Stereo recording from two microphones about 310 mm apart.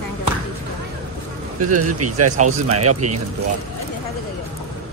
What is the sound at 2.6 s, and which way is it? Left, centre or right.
Speech, right.